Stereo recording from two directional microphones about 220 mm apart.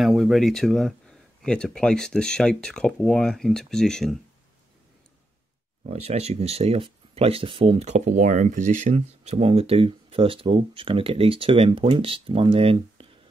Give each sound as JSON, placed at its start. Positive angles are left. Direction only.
{"t": 0.0, "sound": "speech", "side_deg": 0}
{"t": 5.9, "sound": "speech", "side_deg": -30}